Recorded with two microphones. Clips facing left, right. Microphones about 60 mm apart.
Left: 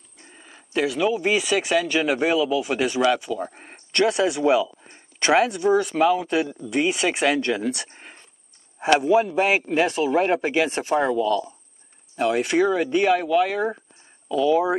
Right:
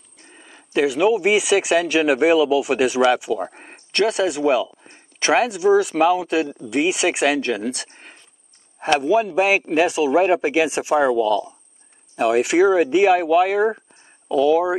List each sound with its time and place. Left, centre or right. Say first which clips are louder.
0.3 s speech: right 3 dB; centre
3.4 s a sound: right 3 dB; centre
3.9 s speech: right 1 dB; centre
11.1 s speech: right 3 dB; centre
12.2 s speech: right 4 dB; centre
14.3 s speech: right 3 dB; centre